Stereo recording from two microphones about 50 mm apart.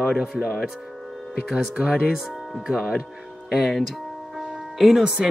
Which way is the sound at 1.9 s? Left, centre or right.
Centre.